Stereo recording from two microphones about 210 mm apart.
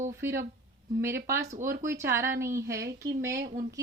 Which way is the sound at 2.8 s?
50° right (ahead or behind).